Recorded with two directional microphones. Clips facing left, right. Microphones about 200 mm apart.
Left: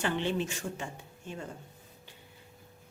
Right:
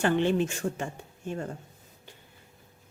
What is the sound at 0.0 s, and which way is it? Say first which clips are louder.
Speech: right 6 dB; 50° right (ahead or behind).